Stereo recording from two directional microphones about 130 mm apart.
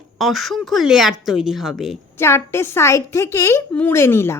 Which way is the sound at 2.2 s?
20° left (ahead or behind).